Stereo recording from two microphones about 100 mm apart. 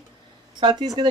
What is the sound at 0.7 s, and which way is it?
Speech, 45° right (ahead or behind).